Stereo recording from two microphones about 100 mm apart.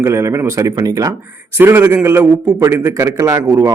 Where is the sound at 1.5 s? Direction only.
25° right (ahead or behind).